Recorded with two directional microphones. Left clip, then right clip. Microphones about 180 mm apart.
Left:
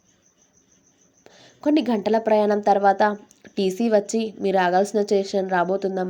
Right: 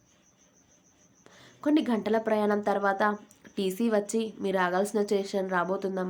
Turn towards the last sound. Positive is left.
turn(degrees=25)  # may be behind; listen again after turning